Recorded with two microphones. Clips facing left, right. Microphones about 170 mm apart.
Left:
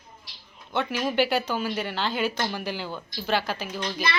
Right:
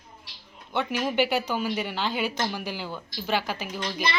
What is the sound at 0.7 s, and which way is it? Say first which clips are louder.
A child's voice: left 1 dB; 15° right (ahead or behind).